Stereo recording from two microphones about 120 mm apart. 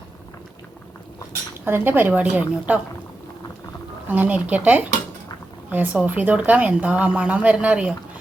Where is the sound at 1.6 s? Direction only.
15° right (ahead or behind).